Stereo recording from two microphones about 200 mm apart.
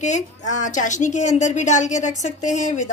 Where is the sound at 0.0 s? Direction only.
35° left (ahead or behind).